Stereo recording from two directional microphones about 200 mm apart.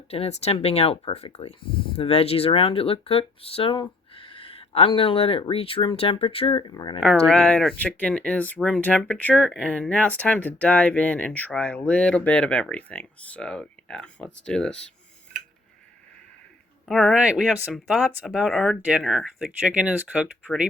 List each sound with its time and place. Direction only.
0.1 s speech: 30° left (ahead or behind)
7.0 s speech: centre (ahead or behind)
16.9 s speech: centre (ahead or behind)